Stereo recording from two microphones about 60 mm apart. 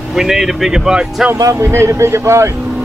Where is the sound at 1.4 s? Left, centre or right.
Right.